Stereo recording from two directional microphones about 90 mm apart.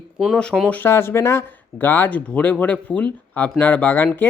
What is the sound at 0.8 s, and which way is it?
Speech, 30° left (ahead or behind).